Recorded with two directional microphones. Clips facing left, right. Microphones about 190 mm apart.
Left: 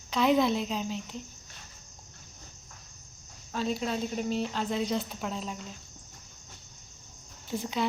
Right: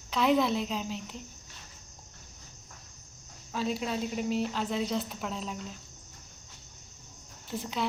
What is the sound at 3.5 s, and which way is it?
Speech, 5° right (ahead or behind).